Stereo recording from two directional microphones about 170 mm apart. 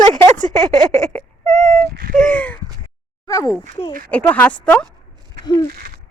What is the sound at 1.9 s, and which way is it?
Speech, 55° right (ahead or behind).